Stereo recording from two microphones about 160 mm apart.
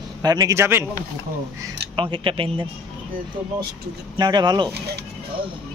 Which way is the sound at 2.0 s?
30° right (ahead or behind).